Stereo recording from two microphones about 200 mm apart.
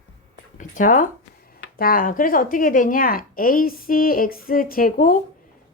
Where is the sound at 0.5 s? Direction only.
40° left (ahead or behind).